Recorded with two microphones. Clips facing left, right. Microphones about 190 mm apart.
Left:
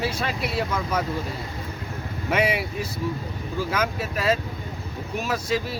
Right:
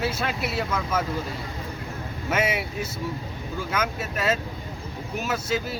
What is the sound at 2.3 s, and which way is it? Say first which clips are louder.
Speech: left 2 dB; centre (ahead or behind).